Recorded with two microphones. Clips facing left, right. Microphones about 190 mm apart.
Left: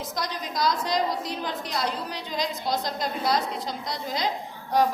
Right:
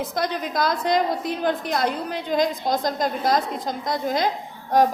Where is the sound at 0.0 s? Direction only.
55° right (ahead or behind).